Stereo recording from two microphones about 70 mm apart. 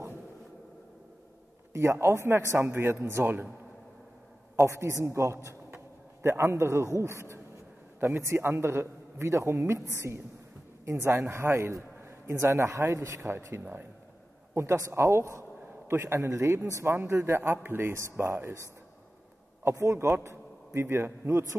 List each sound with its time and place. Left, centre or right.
1.7 s a man's voice: right
4.6 s a man's voice: right
19.7 s a man's voice: right
21.3 s a man's voice: right